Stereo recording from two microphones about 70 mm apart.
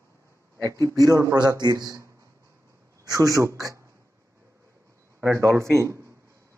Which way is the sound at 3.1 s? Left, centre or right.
Right.